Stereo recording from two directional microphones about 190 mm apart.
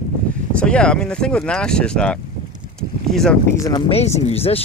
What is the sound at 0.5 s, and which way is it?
Speech, 5° left (ahead or behind).